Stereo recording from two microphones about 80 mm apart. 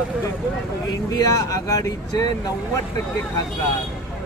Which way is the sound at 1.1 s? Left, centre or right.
Left.